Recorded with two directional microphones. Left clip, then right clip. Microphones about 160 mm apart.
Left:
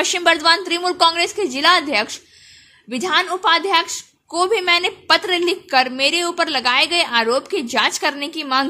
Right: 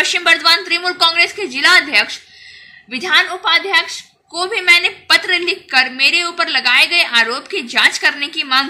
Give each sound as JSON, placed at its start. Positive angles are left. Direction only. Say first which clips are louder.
{"t": 0.0, "sound": "a woman's voice", "louder": "right 3 dB", "side_deg": 55}